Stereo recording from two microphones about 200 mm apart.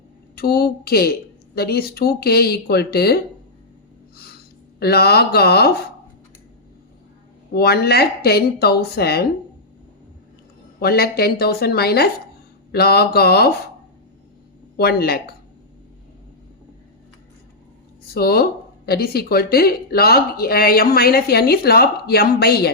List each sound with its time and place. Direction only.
0.3 s speech: 50° left (ahead or behind)
4.8 s speech: 50° left (ahead or behind)
7.5 s speech: 50° left (ahead or behind)
10.8 s speech: 50° left (ahead or behind)
14.8 s speech: 50° left (ahead or behind)
18.1 s speech: 50° left (ahead or behind)